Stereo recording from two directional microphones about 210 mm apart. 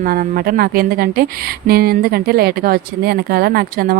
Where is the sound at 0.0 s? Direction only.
45° right (ahead or behind).